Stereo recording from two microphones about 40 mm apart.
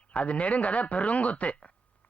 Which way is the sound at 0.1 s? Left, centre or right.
Left.